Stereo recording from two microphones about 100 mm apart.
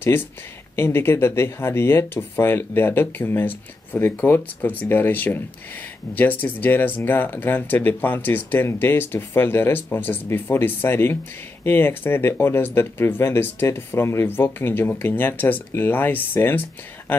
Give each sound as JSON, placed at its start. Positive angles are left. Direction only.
{"t": 0.0, "sound": "speech", "side_deg": 20}